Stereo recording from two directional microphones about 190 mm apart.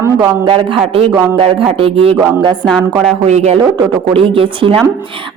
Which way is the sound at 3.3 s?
35° right (ahead or behind).